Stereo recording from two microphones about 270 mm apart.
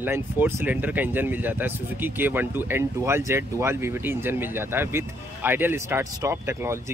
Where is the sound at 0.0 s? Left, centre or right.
Centre.